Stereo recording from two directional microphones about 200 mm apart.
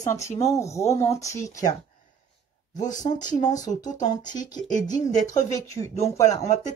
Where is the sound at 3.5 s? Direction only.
20° left (ahead or behind).